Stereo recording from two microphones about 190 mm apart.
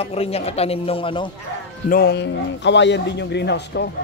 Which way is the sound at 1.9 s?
55° left (ahead or behind).